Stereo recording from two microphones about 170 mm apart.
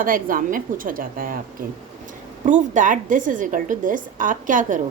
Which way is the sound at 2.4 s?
45° right (ahead or behind).